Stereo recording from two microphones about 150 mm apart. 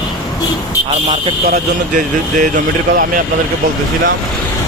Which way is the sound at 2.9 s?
60° right (ahead or behind).